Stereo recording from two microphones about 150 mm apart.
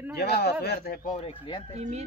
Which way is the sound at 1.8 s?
45° right (ahead or behind).